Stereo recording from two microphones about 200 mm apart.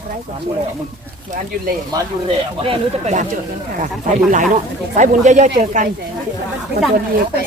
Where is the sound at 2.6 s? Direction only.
35° right (ahead or behind).